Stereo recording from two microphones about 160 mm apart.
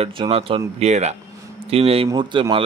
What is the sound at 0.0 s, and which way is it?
Speech, 35° right (ahead or behind).